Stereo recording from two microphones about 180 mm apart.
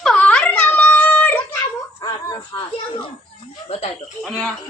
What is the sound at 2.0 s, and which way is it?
Speech, 25° left (ahead or behind).